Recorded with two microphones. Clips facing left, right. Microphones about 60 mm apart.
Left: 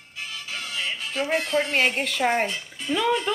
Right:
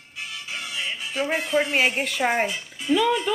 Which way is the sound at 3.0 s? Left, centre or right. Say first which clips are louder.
Even; centre.